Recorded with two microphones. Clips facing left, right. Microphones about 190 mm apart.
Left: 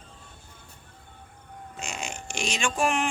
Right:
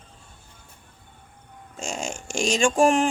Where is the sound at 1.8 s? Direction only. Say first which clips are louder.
Right 5 dB; 45° right (ahead or behind).